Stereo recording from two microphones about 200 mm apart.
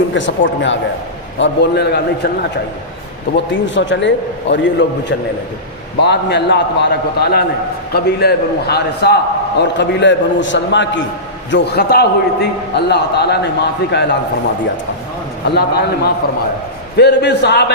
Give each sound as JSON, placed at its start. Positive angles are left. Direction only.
{"t": 0.1, "sound": "a man's voice", "side_deg": 65}
{"t": 3.3, "sound": "a man's voice", "side_deg": 65}
{"t": 15.4, "sound": "a man's voice", "side_deg": 55}